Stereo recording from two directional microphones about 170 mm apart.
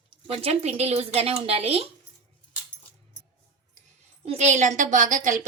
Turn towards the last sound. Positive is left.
turn(degrees=-50)  # may be behind; listen again after turning